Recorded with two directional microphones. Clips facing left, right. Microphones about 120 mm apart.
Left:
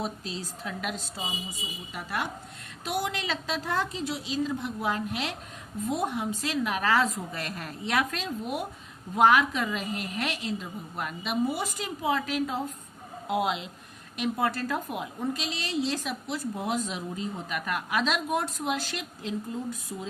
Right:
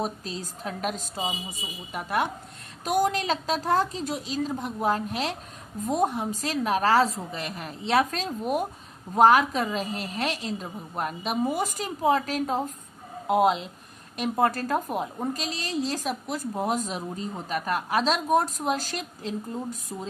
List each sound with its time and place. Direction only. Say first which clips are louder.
0.0 s a woman's voice: right 3 dB; 40° right (ahead or behind)
7.3 s a woman's voice: right 2 dB; 20° right (ahead or behind)
7.9 s a woman's voice: right 5 dB; 40° right (ahead or behind)